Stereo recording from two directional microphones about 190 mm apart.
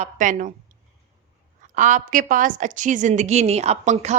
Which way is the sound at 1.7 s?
40° right (ahead or behind).